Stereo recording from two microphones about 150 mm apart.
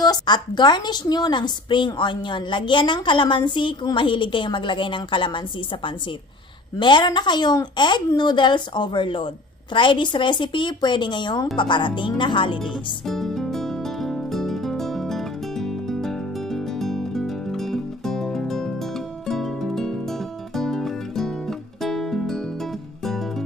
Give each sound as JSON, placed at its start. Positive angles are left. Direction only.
{"t": 0.0, "sound": "a woman's voice", "side_deg": 30}
{"t": 12.5, "sound": "music", "side_deg": 0}